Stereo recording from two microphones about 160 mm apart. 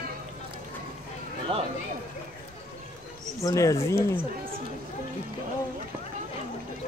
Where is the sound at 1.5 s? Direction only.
35° right (ahead or behind).